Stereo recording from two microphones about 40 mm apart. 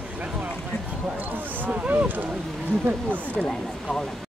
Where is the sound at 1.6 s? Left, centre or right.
Right.